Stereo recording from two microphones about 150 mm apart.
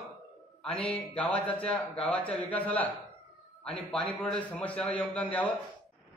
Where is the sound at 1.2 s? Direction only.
10° left (ahead or behind).